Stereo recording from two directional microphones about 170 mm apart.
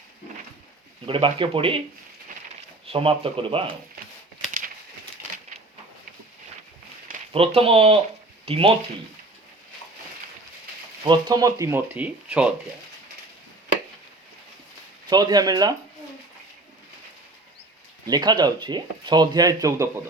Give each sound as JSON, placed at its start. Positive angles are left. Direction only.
{"t": 1.0, "sound": "speech", "side_deg": -30}
{"t": 7.3, "sound": "speech", "side_deg": -35}
{"t": 11.0, "sound": "speech", "side_deg": -25}
{"t": 15.1, "sound": "speech", "side_deg": -25}
{"t": 18.0, "sound": "speech", "side_deg": -25}